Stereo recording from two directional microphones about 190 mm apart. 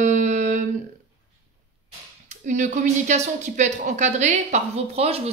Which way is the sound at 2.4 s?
40° right (ahead or behind).